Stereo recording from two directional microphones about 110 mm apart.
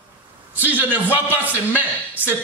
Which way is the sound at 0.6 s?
15° right (ahead or behind).